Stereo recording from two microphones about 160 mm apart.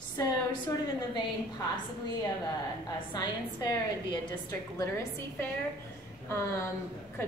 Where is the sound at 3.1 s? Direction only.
25° left (ahead or behind).